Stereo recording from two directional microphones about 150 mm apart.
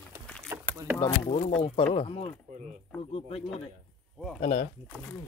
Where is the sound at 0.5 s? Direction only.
20° right (ahead or behind).